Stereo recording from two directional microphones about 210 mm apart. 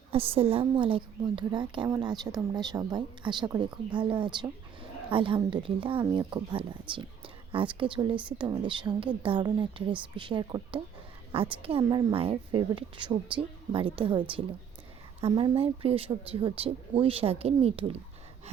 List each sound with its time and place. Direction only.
0.1 s a woman's voice: 25° right (ahead or behind)